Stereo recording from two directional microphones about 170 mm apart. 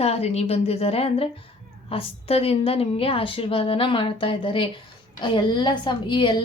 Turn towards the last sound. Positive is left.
turn(degrees=30)  # may be behind; listen again after turning